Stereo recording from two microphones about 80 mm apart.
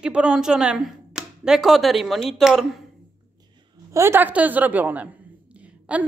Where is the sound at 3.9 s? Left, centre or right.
Right.